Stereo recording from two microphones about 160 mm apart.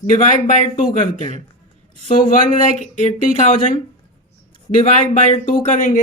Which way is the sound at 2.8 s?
45° left (ahead or behind).